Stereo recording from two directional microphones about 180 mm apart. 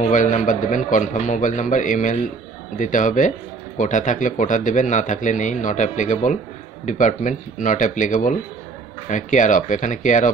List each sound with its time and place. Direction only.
0.0 s a man's voice: 45° left (ahead or behind)